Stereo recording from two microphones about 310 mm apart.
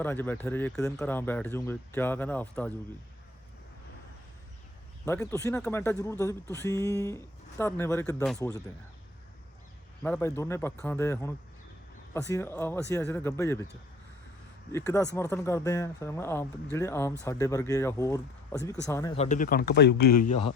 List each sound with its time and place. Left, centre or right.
0.0 s speech: centre
5.0 s speech: centre
10.0 s speech: centre
14.7 s speech: centre; by 20.4 s left